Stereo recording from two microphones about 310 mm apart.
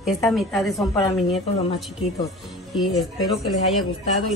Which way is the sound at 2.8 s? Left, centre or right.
Centre.